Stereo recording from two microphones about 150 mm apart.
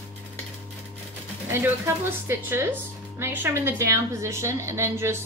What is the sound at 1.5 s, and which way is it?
A woman's voice, 15° right (ahead or behind).